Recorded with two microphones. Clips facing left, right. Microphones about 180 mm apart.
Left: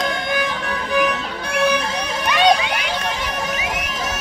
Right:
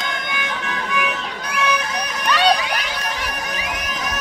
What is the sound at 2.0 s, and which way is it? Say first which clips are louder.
Run: left 1 dB; 25° left (ahead or behind).